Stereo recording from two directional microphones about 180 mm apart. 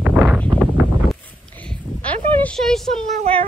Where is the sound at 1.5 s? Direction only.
5° left (ahead or behind).